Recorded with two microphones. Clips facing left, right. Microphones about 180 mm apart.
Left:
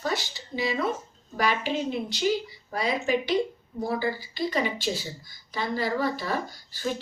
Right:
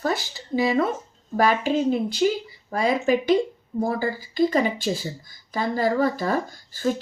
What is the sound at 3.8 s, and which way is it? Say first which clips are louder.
Speech: right 3 dB; 45° right (ahead or behind).